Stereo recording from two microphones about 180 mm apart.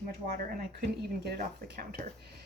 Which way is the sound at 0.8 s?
60° right (ahead or behind).